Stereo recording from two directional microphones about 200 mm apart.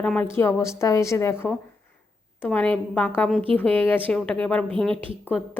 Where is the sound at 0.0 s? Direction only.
5° left (ahead or behind).